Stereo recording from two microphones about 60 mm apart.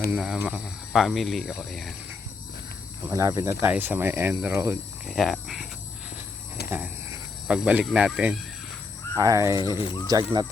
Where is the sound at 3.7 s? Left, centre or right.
Right.